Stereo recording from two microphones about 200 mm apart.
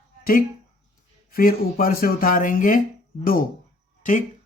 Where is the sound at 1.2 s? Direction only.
45° left (ahead or behind).